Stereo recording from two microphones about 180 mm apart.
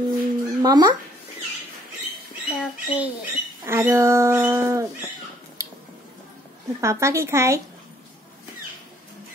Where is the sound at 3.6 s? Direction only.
15° right (ahead or behind).